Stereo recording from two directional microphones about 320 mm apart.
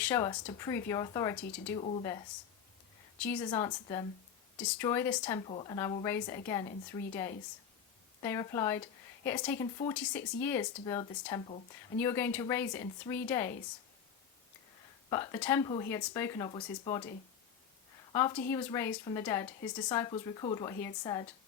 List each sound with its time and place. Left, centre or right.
0.0 s speech: centre
15.1 s speech: centre
18.1 s speech: centre